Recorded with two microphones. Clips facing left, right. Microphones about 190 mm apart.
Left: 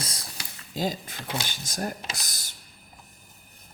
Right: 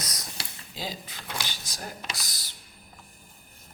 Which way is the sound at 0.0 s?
30° left (ahead or behind).